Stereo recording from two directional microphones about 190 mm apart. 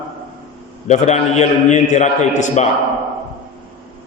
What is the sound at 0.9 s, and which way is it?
A man's voice, 35° left (ahead or behind).